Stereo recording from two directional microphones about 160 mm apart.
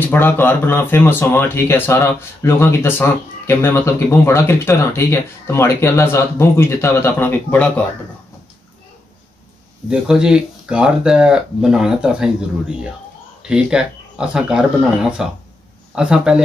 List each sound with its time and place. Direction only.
0.0 s speech: 15° left (ahead or behind)
9.8 s speech: 5° right (ahead or behind)